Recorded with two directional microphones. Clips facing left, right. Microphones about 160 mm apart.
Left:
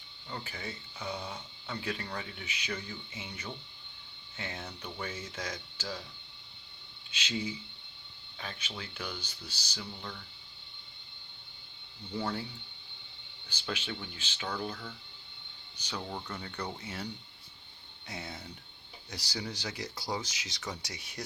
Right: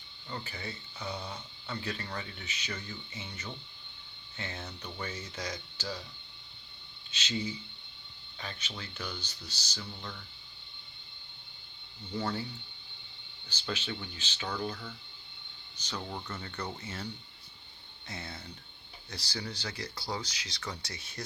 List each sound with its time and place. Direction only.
0.3 s speech: 5° left (ahead or behind)
7.1 s speech: 10° left (ahead or behind)
12.1 s speech: centre (ahead or behind)
13.5 s speech: 10° left (ahead or behind)
15.8 s speech: 10° left (ahead or behind)
18.1 s speech: 15° left (ahead or behind)